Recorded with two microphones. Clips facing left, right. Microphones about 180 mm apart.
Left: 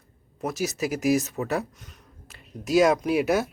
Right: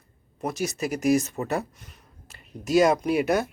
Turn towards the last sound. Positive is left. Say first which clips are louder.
# even
turn(degrees=0)  # may be behind; listen again after turning